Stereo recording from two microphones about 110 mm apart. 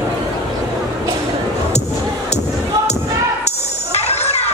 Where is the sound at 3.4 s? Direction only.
75° left (ahead or behind).